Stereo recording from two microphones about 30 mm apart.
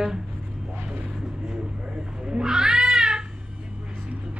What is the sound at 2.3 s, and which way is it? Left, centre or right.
Cat, right.